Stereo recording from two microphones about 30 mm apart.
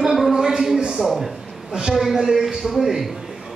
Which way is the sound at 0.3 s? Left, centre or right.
Centre.